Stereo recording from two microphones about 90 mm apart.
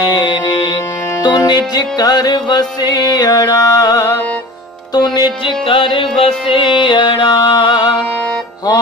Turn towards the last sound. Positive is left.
turn(degrees=55)  # may be behind; listen again after turning